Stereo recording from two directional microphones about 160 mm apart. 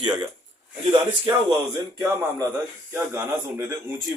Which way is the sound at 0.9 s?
30° right (ahead or behind).